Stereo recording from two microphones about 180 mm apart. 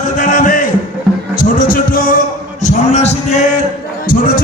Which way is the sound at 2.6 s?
40° left (ahead or behind).